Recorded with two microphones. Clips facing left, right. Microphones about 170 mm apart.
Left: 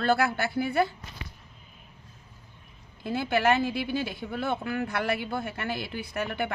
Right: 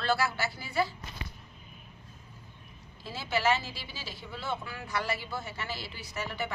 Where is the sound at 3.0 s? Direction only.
55° left (ahead or behind).